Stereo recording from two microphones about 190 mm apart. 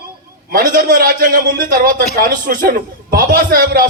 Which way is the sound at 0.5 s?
45° right (ahead or behind).